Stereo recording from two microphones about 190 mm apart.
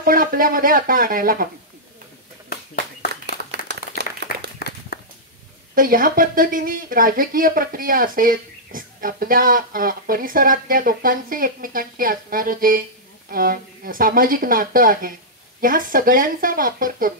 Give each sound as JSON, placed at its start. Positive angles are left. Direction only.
{"t": 0.0, "sound": "speech", "side_deg": -50}
{"t": 4.0, "sound": "applause", "side_deg": -60}
{"t": 4.6, "sound": "a sound", "side_deg": 55}
{"t": 5.8, "sound": "speech", "side_deg": -50}